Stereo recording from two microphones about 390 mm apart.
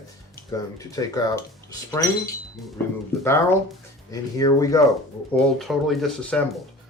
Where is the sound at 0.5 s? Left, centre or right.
Centre.